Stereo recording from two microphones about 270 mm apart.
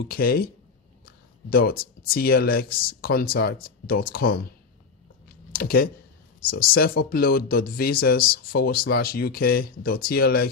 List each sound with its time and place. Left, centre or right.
0.0 s speech: left
5.5 s speech: left